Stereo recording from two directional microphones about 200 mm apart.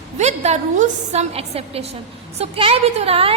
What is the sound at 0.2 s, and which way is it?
A woman's voice, 35° right (ahead or behind).